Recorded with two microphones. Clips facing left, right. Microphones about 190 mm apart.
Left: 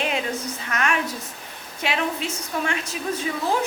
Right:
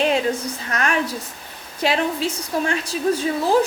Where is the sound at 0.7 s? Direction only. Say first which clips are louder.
Right 1 dB; 35° right (ahead or behind).